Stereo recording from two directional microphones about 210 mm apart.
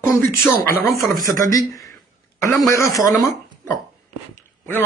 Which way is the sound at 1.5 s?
15° left (ahead or behind).